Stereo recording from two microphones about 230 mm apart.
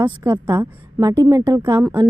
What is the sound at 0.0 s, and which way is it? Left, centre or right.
A woman's voice, centre.